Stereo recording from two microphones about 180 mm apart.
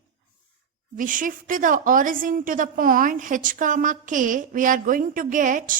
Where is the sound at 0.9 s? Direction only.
50° right (ahead or behind).